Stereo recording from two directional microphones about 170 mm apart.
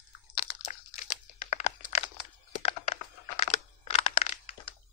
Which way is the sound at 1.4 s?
40° left (ahead or behind).